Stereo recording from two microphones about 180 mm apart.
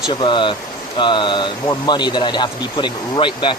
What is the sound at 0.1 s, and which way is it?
Speech, 25° left (ahead or behind).